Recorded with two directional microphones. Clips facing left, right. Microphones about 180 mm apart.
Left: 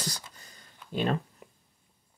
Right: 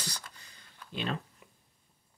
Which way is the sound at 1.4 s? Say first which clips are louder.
Left 7 dB; 40° left (ahead or behind).